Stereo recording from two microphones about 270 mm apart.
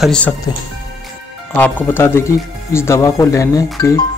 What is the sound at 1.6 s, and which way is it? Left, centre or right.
Speech, centre.